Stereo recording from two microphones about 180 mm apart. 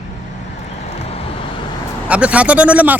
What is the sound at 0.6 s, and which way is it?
Vehicle, 35° left (ahead or behind).